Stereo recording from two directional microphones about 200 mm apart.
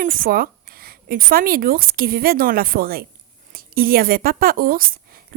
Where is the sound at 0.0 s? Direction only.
45° right (ahead or behind).